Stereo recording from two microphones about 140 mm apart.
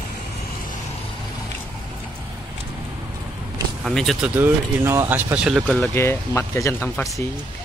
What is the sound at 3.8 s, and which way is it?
Speech, centre (ahead or behind).